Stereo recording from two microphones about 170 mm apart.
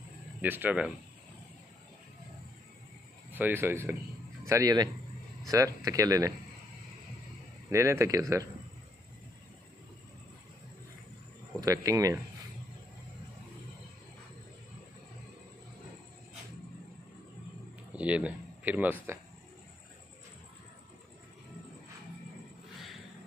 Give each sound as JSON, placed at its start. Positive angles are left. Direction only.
{"t": 0.4, "sound": "speech", "side_deg": -10}
{"t": 3.3, "sound": "speech", "side_deg": -10}
{"t": 5.9, "sound": "speech", "side_deg": -20}
{"t": 7.7, "sound": "speech", "side_deg": -15}
{"t": 11.6, "sound": "speech", "side_deg": -20}
{"t": 17.9, "sound": "speech", "side_deg": -10}